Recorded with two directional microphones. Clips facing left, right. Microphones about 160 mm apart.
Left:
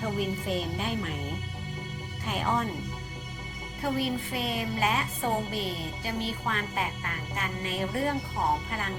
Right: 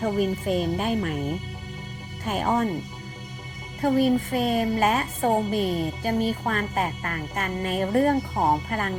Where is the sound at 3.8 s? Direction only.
45° right (ahead or behind).